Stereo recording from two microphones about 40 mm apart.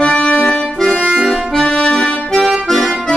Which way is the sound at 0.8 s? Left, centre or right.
Centre.